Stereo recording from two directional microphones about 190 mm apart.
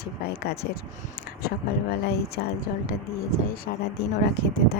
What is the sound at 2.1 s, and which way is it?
Speech, 55° left (ahead or behind).